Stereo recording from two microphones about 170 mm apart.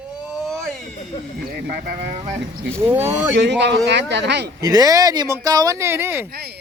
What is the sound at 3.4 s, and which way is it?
A man's voice, 90° right.